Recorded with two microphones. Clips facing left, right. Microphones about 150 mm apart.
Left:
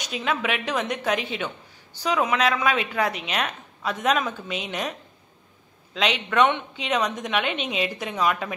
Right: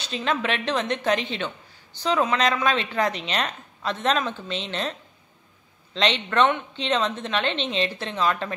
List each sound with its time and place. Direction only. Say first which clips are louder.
0.0 s a woman's voice: right 1 dB; 10° left (ahead or behind)
5.9 s a woman's voice: even; 10° left (ahead or behind)